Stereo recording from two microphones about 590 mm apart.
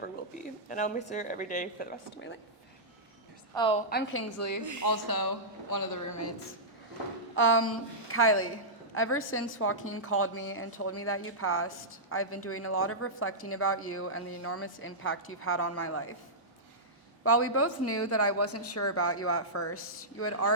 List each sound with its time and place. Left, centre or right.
0.7 s speech: centre
3.5 s speech: centre; by 4.6 s left
4.6 s speech: right
4.9 s speech: left
7.3 s speech: centre
17.2 s speech: left